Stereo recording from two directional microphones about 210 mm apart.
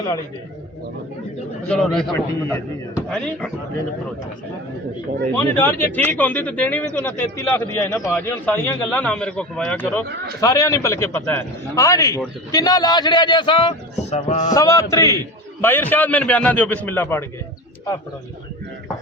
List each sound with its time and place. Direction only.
1.6 s a man's voice: 5° left (ahead or behind)
5.5 s speech: 10° left (ahead or behind)
14.1 s speech: 35° left (ahead or behind)
14.5 s speech: 15° left (ahead or behind)